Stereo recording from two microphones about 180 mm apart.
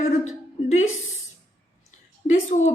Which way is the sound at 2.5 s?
40° left (ahead or behind).